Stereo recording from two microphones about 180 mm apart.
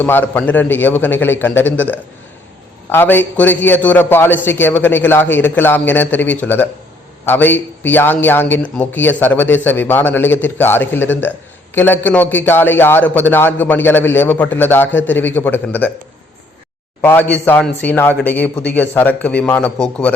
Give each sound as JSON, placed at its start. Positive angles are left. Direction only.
{"t": 0.0, "sound": "a man's voice", "side_deg": 10}
{"t": 17.0, "sound": "a man's voice", "side_deg": 10}